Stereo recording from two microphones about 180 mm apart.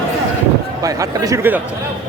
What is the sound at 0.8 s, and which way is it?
Speech, 20° right (ahead or behind).